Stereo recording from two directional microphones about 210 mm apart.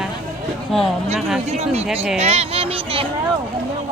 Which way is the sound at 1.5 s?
30° right (ahead or behind).